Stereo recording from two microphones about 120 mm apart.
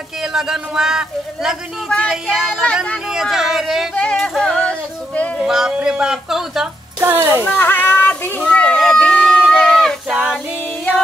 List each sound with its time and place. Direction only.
0.2 s a man's voice: 5° right (ahead or behind)
2.5 s speech: 5° left (ahead or behind)
3.1 s speech: 5° right (ahead or behind)
3.9 s music: 10° left (ahead or behind)
5.4 s speech: 5° right (ahead or behind)
7.0 s speech: 20° right (ahead or behind)
7.4 s a sound: 15° left (ahead or behind)
10.1 s female singing: 5° right (ahead or behind)